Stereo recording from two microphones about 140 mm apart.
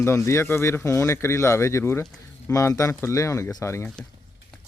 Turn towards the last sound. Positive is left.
turn(degrees=20)  # may be behind; listen again after turning